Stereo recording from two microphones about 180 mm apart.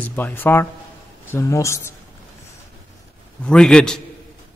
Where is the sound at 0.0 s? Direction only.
10° left (ahead or behind).